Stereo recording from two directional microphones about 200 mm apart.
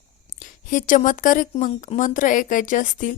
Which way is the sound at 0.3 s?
40° left (ahead or behind).